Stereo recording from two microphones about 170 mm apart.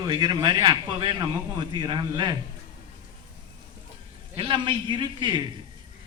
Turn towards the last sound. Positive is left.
turn(degrees=-25)  # may be behind; listen again after turning